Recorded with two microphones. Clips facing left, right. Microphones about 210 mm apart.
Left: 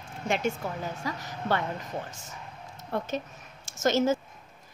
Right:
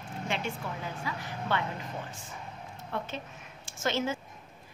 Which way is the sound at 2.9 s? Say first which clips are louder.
Left 6 dB; 40° left (ahead or behind).